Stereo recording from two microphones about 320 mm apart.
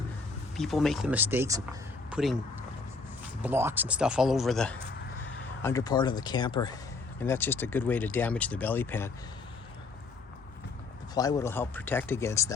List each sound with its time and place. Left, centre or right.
0.5 s speech: centre
3.4 s speech: centre
11.1 s speech: centre